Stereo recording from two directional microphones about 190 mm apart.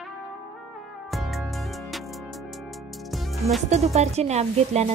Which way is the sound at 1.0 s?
Centre (ahead or behind).